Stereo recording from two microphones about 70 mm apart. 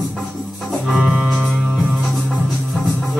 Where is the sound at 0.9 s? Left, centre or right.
Centre.